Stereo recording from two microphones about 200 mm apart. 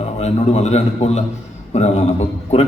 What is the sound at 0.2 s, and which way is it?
A man's voice, 35° left (ahead or behind).